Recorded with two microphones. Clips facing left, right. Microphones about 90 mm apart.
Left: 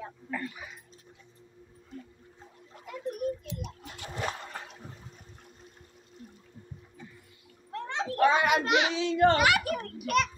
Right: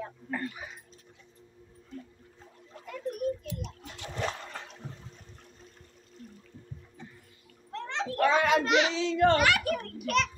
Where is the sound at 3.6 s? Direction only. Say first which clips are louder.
Even; 5° left (ahead or behind).